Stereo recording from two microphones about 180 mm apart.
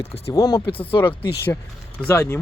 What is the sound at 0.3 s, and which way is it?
Speech, 20° left (ahead or behind).